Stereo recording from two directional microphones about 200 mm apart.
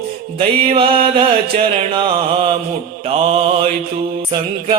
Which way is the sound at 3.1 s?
30° right (ahead or behind).